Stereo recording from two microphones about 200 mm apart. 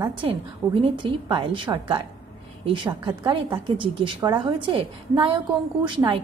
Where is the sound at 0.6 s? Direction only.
20° right (ahead or behind).